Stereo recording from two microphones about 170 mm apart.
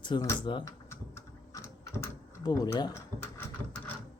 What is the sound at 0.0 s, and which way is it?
Speech, 25° left (ahead or behind).